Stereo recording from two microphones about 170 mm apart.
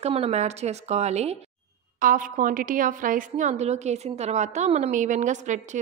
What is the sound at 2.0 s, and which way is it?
A woman's voice, 50° right (ahead or behind).